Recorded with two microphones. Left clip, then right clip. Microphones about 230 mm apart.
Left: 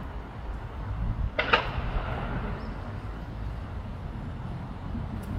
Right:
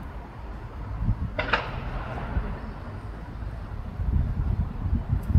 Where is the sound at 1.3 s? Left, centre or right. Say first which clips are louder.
Left 2 dB; left.